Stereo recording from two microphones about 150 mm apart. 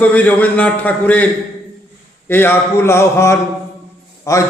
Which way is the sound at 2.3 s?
15° left (ahead or behind).